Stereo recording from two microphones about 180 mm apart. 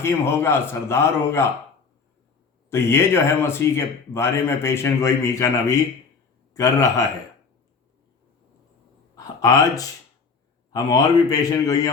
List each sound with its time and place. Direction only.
0.0 s speech: 15° left (ahead or behind)
2.6 s a man's voice: 15° left (ahead or behind)
9.1 s a sound: 20° left (ahead or behind)
10.7 s a man's voice: 20° left (ahead or behind)